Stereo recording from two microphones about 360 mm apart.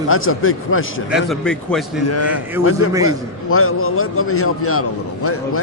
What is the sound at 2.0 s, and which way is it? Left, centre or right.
A man's voice, left.